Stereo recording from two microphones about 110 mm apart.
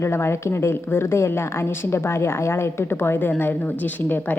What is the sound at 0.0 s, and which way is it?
A woman's voice, 25° left (ahead or behind).